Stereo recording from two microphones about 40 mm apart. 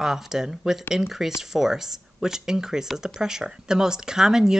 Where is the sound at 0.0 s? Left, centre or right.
Centre.